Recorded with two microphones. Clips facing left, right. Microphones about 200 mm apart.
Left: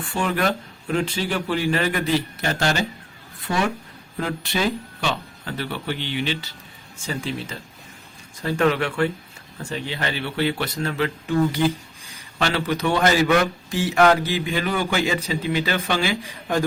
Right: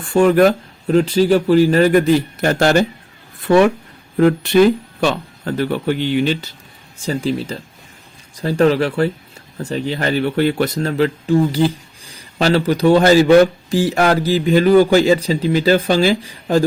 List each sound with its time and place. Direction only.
0.0 s speech: 45° right (ahead or behind)
7.0 s speech: 35° right (ahead or behind)